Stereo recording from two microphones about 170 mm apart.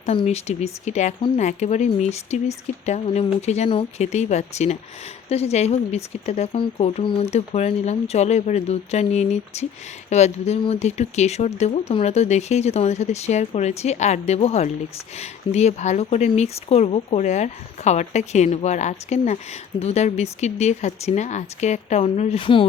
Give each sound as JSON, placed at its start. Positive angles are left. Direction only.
{"t": 0.0, "sound": "speech", "side_deg": 40}